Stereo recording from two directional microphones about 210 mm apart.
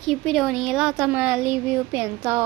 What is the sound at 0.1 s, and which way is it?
Speech, centre (ahead or behind).